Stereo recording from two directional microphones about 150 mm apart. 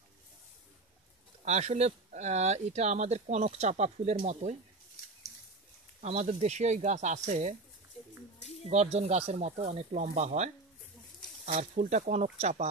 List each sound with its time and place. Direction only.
1.4 s speech: 50° right (ahead or behind)
5.9 s speech: 50° right (ahead or behind)
8.6 s speech: 45° right (ahead or behind)